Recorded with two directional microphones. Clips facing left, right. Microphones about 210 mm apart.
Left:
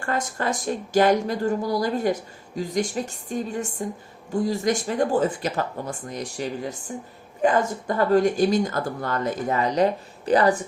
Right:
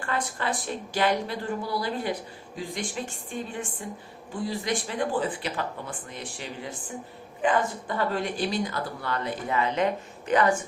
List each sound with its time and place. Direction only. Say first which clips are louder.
0.0 s a woman's voice: left 4 dB; 45° left (ahead or behind)